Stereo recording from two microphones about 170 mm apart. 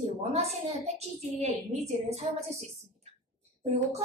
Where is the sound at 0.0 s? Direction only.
40° right (ahead or behind).